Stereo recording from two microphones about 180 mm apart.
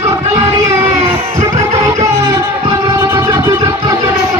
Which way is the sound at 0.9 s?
35° right (ahead or behind).